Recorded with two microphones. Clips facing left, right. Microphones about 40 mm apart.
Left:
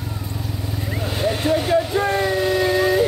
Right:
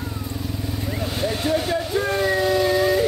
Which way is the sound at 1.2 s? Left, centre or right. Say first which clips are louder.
Left 3 dB; left.